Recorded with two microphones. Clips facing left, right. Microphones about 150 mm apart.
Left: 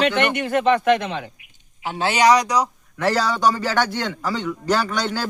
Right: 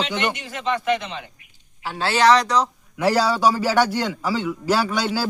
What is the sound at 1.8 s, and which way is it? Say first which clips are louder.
Speech: even; 20° left (ahead or behind).